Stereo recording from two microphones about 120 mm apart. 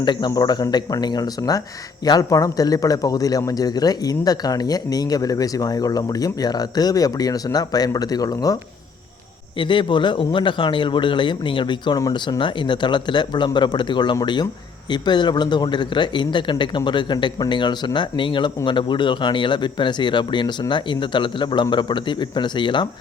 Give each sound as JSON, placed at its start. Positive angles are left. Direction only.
{"t": 0.0, "sound": "speech", "side_deg": 40}
{"t": 9.6, "sound": "speech", "side_deg": 40}